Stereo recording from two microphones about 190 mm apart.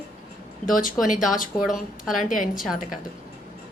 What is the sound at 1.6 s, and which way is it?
Speech, centre (ahead or behind).